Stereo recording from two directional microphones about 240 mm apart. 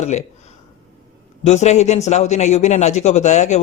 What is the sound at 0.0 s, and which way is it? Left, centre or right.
Speech, left.